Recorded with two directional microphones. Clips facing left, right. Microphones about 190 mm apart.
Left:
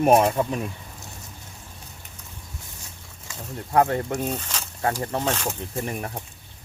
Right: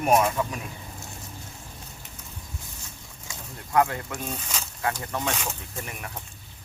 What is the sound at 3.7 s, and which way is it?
Speech, 35° left (ahead or behind).